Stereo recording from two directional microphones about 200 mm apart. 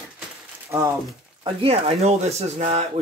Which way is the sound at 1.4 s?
30° right (ahead or behind).